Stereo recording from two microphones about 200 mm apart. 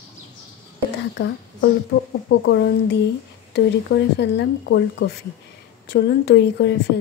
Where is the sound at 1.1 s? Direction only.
60° left (ahead or behind).